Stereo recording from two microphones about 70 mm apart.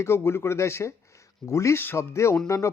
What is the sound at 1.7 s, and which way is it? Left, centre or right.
Speech, left.